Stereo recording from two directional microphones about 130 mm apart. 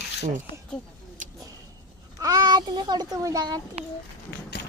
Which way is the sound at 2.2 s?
30° right (ahead or behind).